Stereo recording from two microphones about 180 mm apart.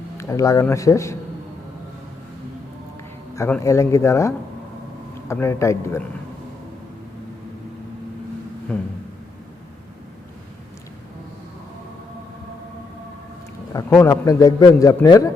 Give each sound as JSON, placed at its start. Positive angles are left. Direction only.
{"t": 0.2, "sound": "speech", "side_deg": 15}
{"t": 3.3, "sound": "speech", "side_deg": 15}
{"t": 8.7, "sound": "speech", "side_deg": 10}
{"t": 13.9, "sound": "a man's voice", "side_deg": 15}